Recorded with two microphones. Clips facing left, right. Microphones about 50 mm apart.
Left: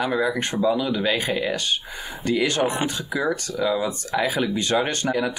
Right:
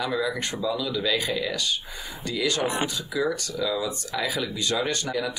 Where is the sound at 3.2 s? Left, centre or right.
Left.